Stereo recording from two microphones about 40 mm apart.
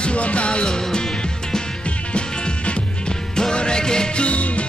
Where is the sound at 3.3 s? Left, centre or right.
Left.